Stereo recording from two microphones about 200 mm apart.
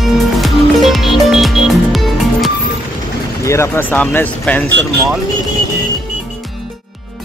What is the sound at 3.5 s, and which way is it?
Speech, 10° left (ahead or behind).